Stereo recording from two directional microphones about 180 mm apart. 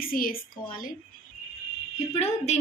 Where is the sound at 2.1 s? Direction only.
40° left (ahead or behind).